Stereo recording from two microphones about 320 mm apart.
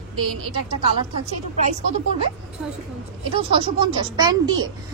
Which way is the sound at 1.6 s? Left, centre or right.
Right.